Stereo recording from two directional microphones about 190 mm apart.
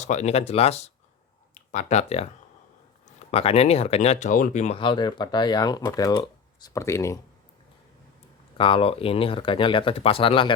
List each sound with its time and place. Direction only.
0.0 s speech: 35° left (ahead or behind)
3.3 s speech: 30° left (ahead or behind)
4.8 s speech: 25° left (ahead or behind)
8.5 s speech: 30° left (ahead or behind)